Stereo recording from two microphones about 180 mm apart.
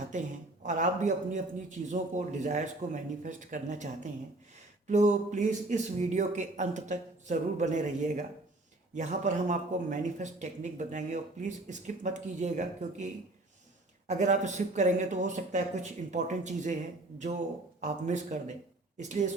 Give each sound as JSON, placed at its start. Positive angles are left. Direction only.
{"t": 0.1, "sound": "speech", "side_deg": -45}
{"t": 14.1, "sound": "speech", "side_deg": -40}